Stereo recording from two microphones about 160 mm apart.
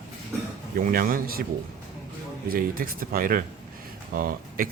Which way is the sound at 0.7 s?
65° right (ahead or behind).